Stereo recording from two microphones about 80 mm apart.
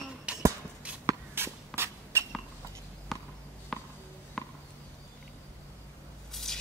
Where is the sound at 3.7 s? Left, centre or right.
Centre.